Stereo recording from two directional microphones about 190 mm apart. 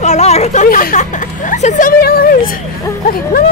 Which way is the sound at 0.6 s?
45° left (ahead or behind).